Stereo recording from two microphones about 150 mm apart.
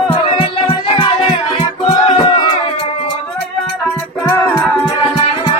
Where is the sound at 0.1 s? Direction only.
35° left (ahead or behind); by 4.8 s 15° left (ahead or behind).